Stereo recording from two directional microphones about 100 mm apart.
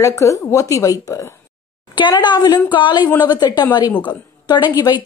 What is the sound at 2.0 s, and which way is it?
A woman's voice, 50° left (ahead or behind).